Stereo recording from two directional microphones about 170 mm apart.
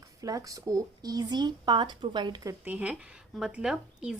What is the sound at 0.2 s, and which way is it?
Speech, 20° right (ahead or behind).